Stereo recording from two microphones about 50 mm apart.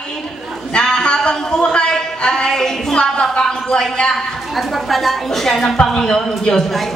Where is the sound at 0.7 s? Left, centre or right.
Centre.